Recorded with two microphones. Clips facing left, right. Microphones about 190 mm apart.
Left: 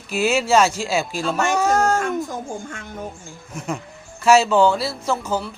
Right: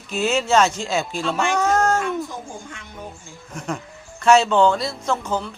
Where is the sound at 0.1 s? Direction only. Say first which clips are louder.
Left 1 dB; 10° left (ahead or behind).